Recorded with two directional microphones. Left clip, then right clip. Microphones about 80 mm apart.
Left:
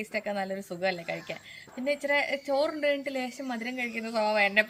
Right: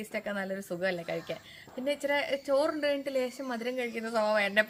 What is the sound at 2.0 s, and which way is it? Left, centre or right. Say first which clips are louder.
Speech: left 2 dB; centre.